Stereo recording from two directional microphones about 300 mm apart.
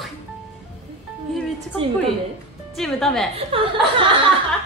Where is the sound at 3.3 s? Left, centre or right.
Centre.